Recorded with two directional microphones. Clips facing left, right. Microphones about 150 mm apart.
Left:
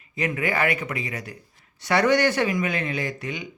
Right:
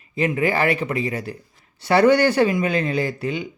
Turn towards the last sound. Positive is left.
turn(degrees=-30)  # may be behind; listen again after turning